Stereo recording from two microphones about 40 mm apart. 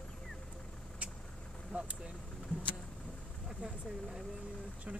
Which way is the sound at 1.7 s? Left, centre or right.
Right.